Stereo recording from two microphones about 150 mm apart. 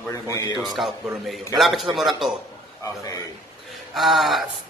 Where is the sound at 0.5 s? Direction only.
Centre (ahead or behind).